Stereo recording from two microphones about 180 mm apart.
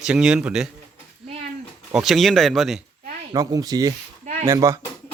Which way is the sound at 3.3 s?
20° right (ahead or behind).